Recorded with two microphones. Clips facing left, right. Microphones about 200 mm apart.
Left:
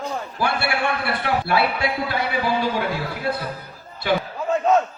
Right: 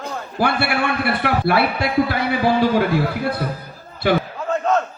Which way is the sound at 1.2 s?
60° right (ahead or behind).